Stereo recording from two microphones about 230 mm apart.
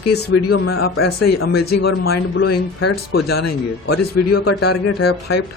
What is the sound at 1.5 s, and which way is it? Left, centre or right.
Speech, left.